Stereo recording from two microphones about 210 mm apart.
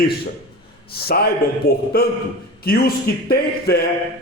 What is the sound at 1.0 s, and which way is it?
A man's voice, 45° left (ahead or behind).